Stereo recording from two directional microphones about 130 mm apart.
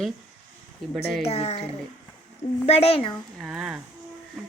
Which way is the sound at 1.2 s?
55° left (ahead or behind).